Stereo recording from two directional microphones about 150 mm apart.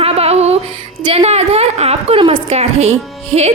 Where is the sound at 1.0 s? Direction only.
40° right (ahead or behind).